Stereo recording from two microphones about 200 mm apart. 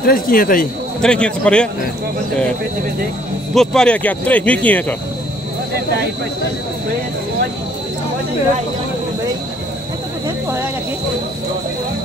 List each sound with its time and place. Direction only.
0.0 s speech: 45° left (ahead or behind)
1.0 s speech: 5° left (ahead or behind)
3.5 s speech: 5° left (ahead or behind)
10.2 s a sound: 10° right (ahead or behind)